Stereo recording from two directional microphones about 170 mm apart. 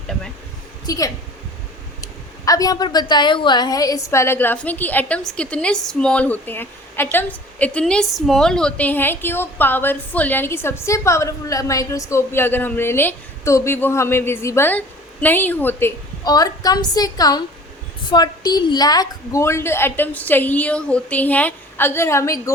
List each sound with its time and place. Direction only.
0.9 s a woman's voice: 20° left (ahead or behind)
16.2 s a woman's voice: 20° left (ahead or behind)